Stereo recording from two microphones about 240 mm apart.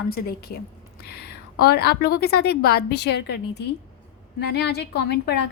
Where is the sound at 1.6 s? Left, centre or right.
Left.